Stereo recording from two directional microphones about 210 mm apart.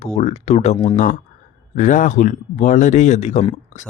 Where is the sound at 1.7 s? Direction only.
35° left (ahead or behind).